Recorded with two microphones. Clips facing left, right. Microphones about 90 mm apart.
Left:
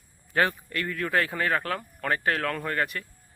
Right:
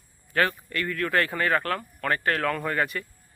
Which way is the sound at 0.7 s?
5° left (ahead or behind).